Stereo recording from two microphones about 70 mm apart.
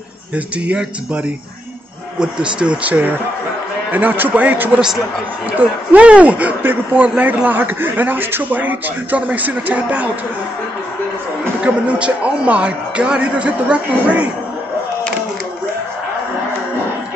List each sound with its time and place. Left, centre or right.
0.7 s a man's voice: centre
11.6 s a man's voice: centre